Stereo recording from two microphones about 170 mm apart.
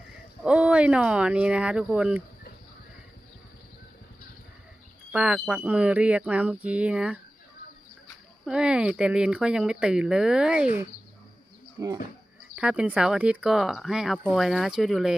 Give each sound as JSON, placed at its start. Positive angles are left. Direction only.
{"t": 0.4, "sound": "speech", "side_deg": -5}
{"t": 5.1, "sound": "speech", "side_deg": -5}
{"t": 8.4, "sound": "speech", "side_deg": -5}
{"t": 11.8, "sound": "speech", "side_deg": -20}
{"t": 12.5, "sound": "speech", "side_deg": -5}